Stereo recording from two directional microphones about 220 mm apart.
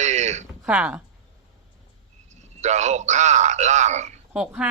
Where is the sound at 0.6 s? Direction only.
5° right (ahead or behind).